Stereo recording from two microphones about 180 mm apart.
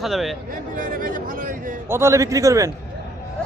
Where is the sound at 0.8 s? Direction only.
50° right (ahead or behind).